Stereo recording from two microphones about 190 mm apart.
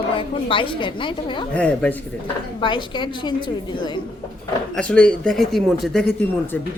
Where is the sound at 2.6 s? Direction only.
25° left (ahead or behind).